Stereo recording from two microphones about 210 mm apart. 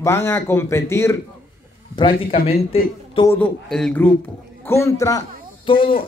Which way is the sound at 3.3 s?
5° left (ahead or behind).